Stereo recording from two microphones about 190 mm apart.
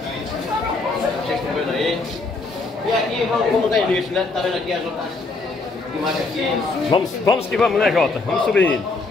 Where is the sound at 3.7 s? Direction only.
Centre (ahead or behind).